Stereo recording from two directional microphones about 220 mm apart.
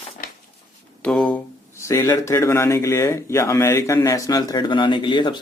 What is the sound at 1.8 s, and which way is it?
A man's voice, 10° left (ahead or behind).